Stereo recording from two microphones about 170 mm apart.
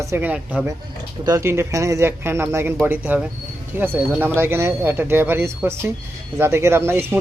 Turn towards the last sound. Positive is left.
turn(degrees=-15)  # may be behind; listen again after turning